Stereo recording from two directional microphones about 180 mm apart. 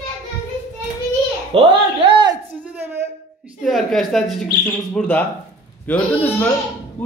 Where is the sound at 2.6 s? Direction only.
10° right (ahead or behind).